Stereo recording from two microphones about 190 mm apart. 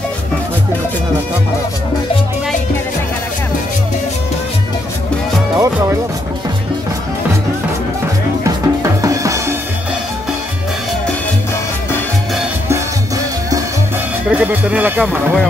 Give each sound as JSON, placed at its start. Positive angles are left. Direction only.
{"t": 5.6, "sound": "speech", "side_deg": -15}
{"t": 8.5, "sound": "drum", "side_deg": -15}
{"t": 14.3, "sound": "speech", "side_deg": -5}